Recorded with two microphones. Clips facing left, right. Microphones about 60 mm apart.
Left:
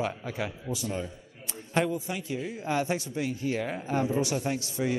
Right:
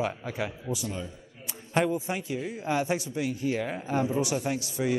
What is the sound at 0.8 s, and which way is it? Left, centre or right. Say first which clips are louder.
Speech: left 2 dB; left.